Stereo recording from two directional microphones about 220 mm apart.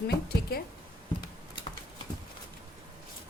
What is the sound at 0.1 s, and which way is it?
Speech, 45° left (ahead or behind).